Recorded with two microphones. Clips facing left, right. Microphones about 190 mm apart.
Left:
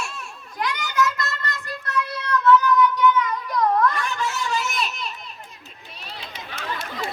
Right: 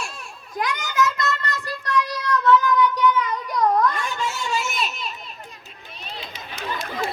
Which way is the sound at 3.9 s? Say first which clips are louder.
Left 1 dB; 25° right (ahead or behind).